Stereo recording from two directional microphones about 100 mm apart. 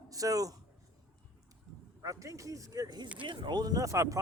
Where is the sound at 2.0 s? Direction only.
35° right (ahead or behind).